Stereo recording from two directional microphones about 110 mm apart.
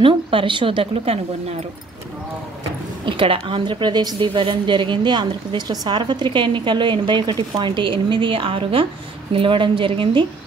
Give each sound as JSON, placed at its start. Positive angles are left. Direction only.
{"t": 0.0, "sound": "a woman's voice", "side_deg": -50}
{"t": 3.1, "sound": "a woman's voice", "side_deg": -50}